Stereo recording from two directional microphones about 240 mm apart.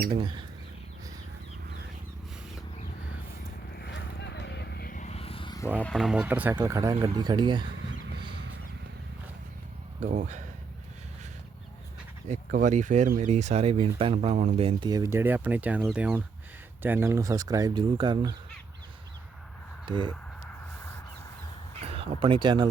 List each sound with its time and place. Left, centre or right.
0.1 s speech: centre
3.7 s vehicle: left; by 5.6 s centre
5.7 s speech: centre
10.0 s speech: right
12.3 s speech: right
19.9 s speech: right
21.8 s speech: right